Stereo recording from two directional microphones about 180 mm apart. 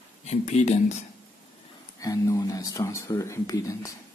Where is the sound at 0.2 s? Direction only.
40° left (ahead or behind).